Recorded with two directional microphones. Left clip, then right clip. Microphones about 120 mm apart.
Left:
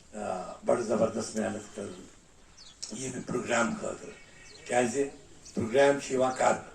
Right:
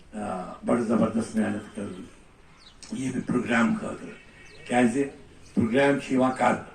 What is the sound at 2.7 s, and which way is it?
Speech, 30° left (ahead or behind).